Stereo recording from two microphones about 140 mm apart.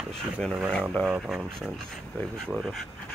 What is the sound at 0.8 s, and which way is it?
Speech, 5° right (ahead or behind).